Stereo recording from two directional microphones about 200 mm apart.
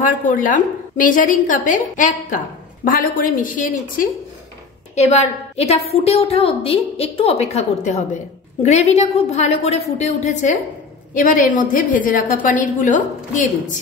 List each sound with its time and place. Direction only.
0.3 s a woman's voice: 40° left (ahead or behind)